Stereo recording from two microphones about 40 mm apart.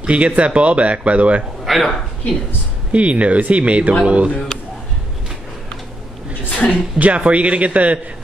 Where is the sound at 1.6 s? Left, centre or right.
Centre.